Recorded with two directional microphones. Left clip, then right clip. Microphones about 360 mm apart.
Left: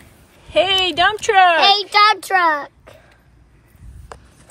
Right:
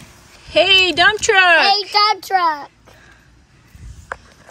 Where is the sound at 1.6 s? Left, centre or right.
Left.